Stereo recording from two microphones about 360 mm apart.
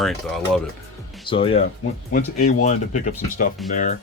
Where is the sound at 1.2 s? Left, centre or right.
Centre.